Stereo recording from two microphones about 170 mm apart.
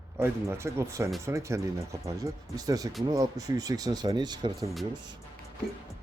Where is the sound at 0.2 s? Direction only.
15° right (ahead or behind).